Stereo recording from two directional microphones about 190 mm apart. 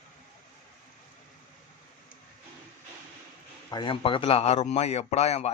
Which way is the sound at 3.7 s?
25° left (ahead or behind).